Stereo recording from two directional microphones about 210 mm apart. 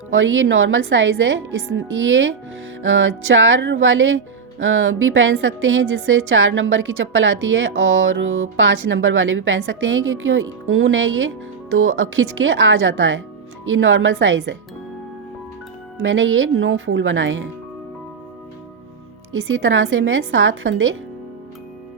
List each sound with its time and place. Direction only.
0.1 s a woman's voice: 65° right (ahead or behind)
16.0 s a woman's voice: 65° right (ahead or behind)
19.3 s a woman's voice: 70° right (ahead or behind)